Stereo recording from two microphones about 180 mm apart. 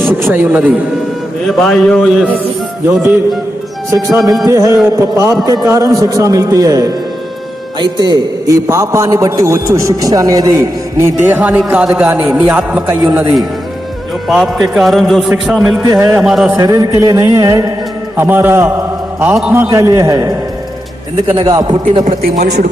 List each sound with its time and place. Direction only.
0.3 s a man's voice: 10° right (ahead or behind)
1.5 s a man's voice: centre (ahead or behind)
3.9 s a man's voice: 15° right (ahead or behind)
14.3 s a man's voice: centre (ahead or behind)
15.8 s a man's voice: 15° right (ahead or behind)
16.2 s a man's voice: centre (ahead or behind)
16.6 s a man's voice: 20° right (ahead or behind)
19.6 s a man's voice: 15° right (ahead or behind)
22.4 s speech: 40° right (ahead or behind)